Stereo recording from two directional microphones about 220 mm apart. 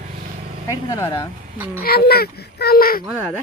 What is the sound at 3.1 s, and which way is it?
Speech, 10° right (ahead or behind).